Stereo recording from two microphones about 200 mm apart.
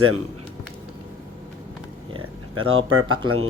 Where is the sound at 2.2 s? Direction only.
90° right.